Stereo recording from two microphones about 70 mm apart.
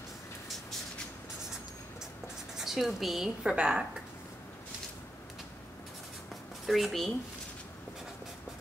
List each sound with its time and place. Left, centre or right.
2.5 s a woman's voice: centre
3.5 s a woman's voice: centre
6.6 s speech: centre